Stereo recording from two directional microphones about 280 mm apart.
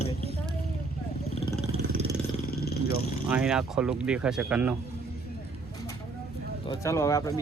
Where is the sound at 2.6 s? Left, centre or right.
Left.